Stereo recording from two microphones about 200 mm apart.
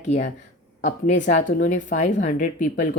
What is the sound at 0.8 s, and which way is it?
Speech, 35° left (ahead or behind).